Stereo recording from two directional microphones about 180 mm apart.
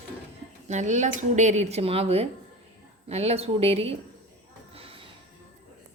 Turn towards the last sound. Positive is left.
turn(degrees=-30)  # may be behind; listen again after turning